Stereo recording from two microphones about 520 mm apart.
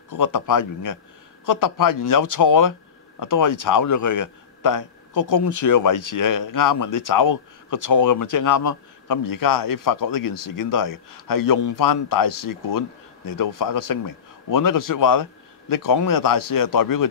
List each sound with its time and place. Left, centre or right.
0.1 s a man's voice: left